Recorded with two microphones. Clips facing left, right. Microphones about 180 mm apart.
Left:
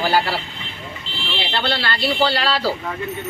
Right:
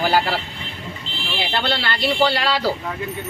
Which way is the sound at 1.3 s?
20° right (ahead or behind).